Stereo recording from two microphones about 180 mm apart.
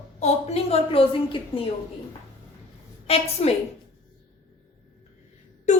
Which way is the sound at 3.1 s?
35° left (ahead or behind).